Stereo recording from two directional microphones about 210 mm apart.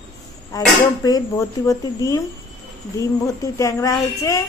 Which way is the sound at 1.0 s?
20° left (ahead or behind).